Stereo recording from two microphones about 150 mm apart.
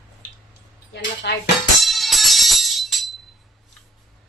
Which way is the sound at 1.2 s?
90° left.